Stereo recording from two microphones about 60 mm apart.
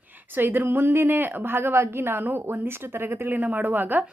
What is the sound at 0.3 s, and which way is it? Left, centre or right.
A woman's voice, right.